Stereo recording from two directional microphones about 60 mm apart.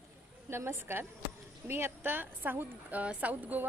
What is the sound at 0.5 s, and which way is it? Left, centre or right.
A woman's voice, right.